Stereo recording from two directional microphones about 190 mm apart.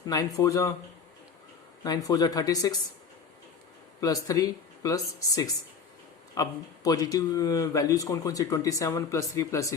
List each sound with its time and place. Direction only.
0.0 s speech: 20° left (ahead or behind)
1.8 s speech: 20° left (ahead or behind)
4.0 s speech: 20° left (ahead or behind)